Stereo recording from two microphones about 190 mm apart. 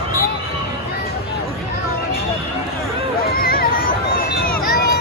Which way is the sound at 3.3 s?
50° left (ahead or behind).